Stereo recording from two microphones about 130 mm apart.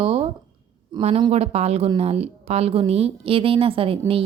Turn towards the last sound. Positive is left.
turn(degrees=-45)  # may be behind; listen again after turning